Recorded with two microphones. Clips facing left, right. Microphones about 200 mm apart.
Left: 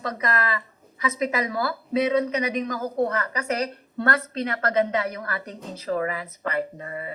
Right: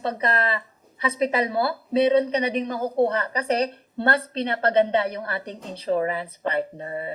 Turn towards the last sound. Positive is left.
turn(degrees=-30)  # may be behind; listen again after turning